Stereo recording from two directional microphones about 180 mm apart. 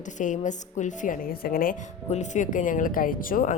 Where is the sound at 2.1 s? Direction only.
40° left (ahead or behind).